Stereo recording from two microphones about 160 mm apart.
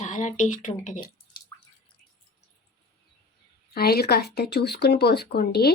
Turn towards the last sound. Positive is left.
turn(degrees=80)